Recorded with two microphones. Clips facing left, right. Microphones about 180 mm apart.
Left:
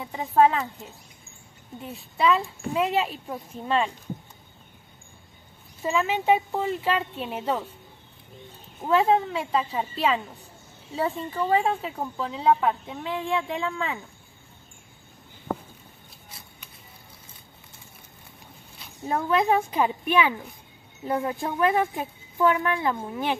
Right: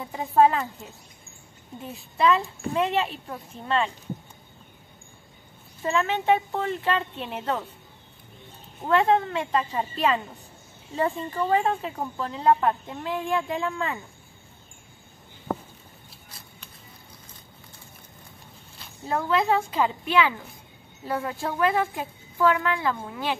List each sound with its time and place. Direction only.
0.0 s speech: centre (ahead or behind)
1.8 s a woman's voice: centre (ahead or behind)
5.8 s a woman's voice: 10° left (ahead or behind)
8.8 s speech: 5° left (ahead or behind)
19.0 s speech: 20° left (ahead or behind)